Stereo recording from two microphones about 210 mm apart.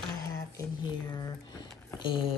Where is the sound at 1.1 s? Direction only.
15° left (ahead or behind).